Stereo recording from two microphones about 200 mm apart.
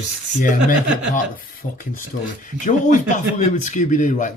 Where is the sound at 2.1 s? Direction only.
60° left (ahead or behind).